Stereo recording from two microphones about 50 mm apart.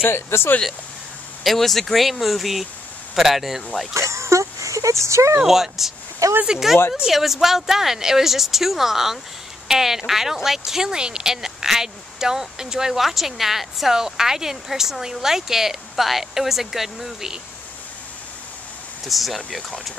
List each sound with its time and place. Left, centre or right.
0.0 s speech: left
1.4 s speech: centre
3.9 s a sound: right
5.4 s speech: centre
19.0 s speech: centre